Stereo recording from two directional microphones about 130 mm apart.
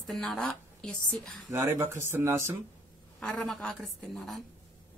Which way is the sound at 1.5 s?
20° right (ahead or behind).